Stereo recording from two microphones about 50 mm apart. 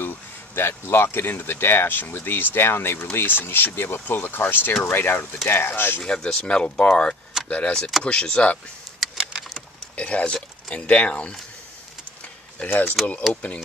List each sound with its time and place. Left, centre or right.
0.6 s speech: left
5.4 s speech: left
6.0 s speech: centre
9.9 s speech: left
12.6 s speech: left